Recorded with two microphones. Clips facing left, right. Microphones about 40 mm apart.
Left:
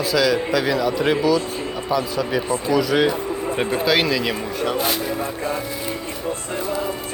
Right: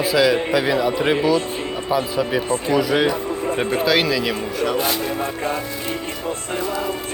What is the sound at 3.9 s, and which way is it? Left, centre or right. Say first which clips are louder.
Speech: even; centre.